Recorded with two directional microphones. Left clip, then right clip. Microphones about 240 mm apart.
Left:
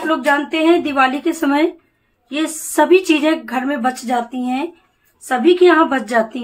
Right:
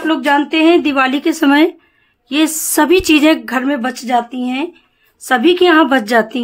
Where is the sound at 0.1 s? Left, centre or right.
Right.